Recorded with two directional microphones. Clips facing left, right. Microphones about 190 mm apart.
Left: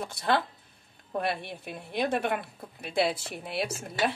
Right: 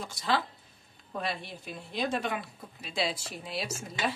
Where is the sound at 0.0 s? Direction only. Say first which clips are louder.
Left 3 dB; 60° left (ahead or behind).